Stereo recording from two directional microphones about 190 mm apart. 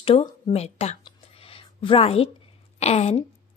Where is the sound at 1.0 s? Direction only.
30° left (ahead or behind).